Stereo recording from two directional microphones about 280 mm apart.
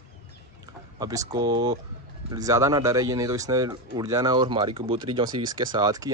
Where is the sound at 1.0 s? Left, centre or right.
Centre.